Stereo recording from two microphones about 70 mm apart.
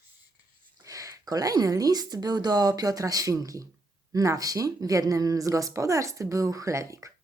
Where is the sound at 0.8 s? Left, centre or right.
Right.